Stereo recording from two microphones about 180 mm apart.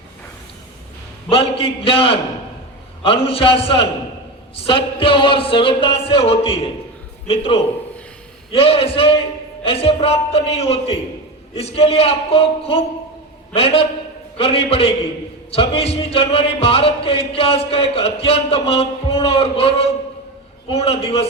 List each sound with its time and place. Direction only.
1.3 s speech: 30° left (ahead or behind)
4.6 s music: 30° left (ahead or behind)
7.3 s speech: 30° left (ahead or behind)